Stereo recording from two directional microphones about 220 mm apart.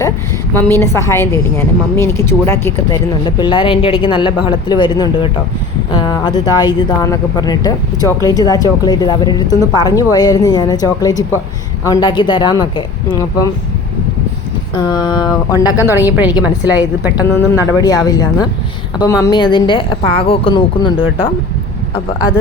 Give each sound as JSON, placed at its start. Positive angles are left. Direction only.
{"t": 0.5, "sound": "a woman's voice", "side_deg": 10}
{"t": 14.8, "sound": "a woman's voice", "side_deg": 20}
{"t": 15.8, "sound": "a woman's voice", "side_deg": -10}
{"t": 17.5, "sound": "a woman's voice", "side_deg": 15}